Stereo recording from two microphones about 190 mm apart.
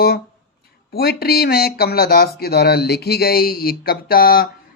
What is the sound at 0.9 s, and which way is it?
Speech, 55° left (ahead or behind).